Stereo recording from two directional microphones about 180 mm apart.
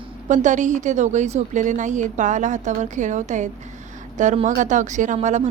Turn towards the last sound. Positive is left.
turn(degrees=-40)  # may be behind; listen again after turning